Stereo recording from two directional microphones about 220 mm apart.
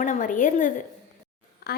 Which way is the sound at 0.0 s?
35° left (ahead or behind).